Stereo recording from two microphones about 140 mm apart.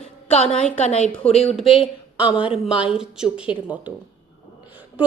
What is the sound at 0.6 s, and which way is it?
Speech, 55° left (ahead or behind).